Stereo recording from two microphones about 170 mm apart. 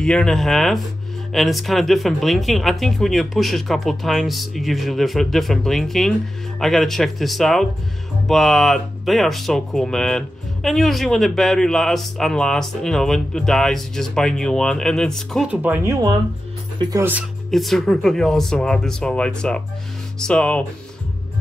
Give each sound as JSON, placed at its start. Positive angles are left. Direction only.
{"t": 0.0, "sound": "speech", "side_deg": 5}
{"t": 15.5, "sound": "speech", "side_deg": -10}
{"t": 17.5, "sound": "speech", "side_deg": 0}